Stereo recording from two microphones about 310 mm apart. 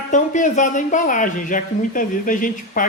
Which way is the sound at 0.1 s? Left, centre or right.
Left.